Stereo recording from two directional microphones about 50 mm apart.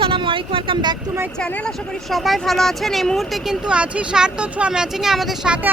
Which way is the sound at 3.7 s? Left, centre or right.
Right.